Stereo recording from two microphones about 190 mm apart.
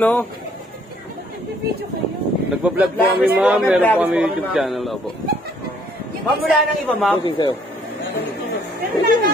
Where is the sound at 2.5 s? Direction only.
5° right (ahead or behind).